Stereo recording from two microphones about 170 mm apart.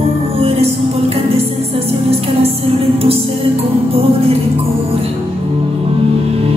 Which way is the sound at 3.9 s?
35° right (ahead or behind).